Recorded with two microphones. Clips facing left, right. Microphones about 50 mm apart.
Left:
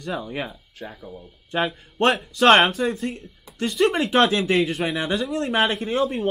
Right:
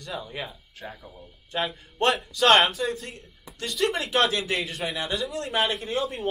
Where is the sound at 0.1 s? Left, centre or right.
Left.